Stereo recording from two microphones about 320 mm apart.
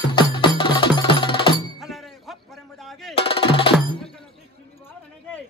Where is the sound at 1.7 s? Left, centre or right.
Centre.